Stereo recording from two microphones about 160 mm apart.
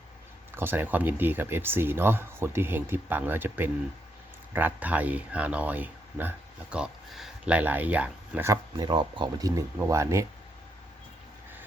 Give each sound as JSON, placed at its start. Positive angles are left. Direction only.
{"t": 0.5, "sound": "speech", "side_deg": -15}
{"t": 8.8, "sound": "speech", "side_deg": -25}